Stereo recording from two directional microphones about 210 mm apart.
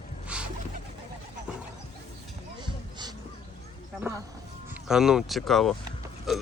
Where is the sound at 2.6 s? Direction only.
20° right (ahead or behind).